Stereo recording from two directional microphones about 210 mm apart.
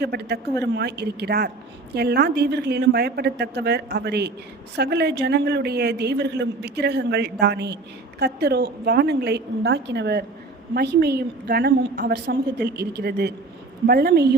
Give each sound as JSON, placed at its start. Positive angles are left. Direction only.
{"t": 0.0, "sound": "a man's voice", "side_deg": -50}